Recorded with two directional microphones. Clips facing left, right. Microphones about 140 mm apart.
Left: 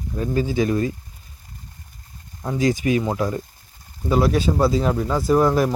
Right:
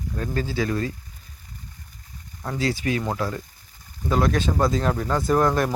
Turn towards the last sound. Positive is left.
turn(degrees=5)  # may be behind; listen again after turning